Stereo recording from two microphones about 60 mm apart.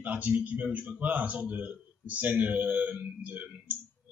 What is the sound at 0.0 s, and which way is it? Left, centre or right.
Speech, right.